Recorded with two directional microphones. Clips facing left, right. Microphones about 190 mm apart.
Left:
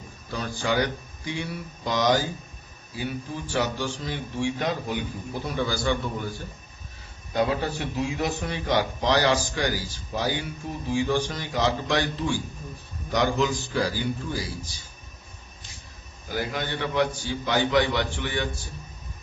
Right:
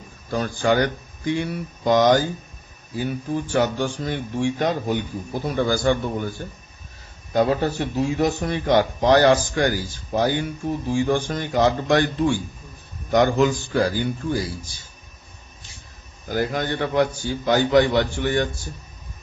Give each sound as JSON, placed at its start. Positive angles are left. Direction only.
{"t": 0.3, "sound": "a man's voice", "side_deg": -50}
{"t": 7.3, "sound": "a man's voice", "side_deg": -45}
{"t": 16.3, "sound": "a man's voice", "side_deg": -45}